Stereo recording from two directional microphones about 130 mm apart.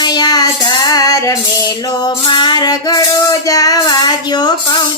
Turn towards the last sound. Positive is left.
turn(degrees=30)  # may be behind; listen again after turning